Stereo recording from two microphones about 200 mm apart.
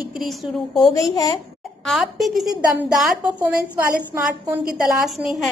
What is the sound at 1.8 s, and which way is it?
A woman's voice, centre (ahead or behind).